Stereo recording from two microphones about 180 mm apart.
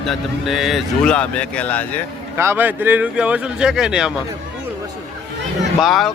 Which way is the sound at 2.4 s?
10° right (ahead or behind).